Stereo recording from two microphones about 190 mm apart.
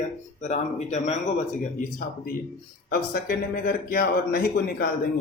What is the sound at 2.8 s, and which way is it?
Speech, 50° left (ahead or behind).